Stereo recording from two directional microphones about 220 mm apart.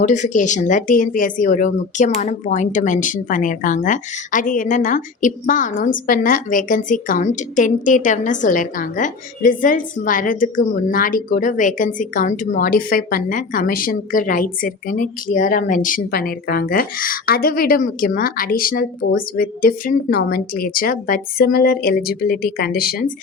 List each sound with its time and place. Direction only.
0.0 s speech: 35° left (ahead or behind)